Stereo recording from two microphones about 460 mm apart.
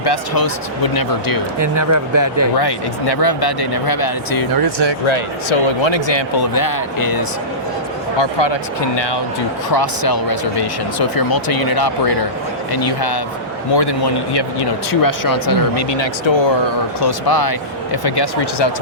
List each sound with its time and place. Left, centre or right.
0.0 s speech: left
1.5 s speech: right
2.6 s speech: left
4.6 s speech: right
5.0 s speech: left
8.2 s speech: left
9.6 s speech: left
15.2 s speech: left
17.0 s speech: left